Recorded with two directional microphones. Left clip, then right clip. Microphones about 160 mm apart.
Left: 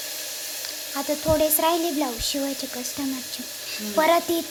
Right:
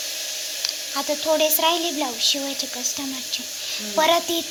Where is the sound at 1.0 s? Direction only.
20° left (ahead or behind).